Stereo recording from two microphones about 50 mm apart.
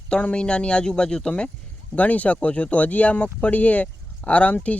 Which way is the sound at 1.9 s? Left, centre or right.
Left.